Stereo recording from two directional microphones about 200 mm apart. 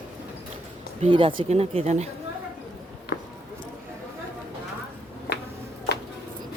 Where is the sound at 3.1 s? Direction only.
55° left (ahead or behind).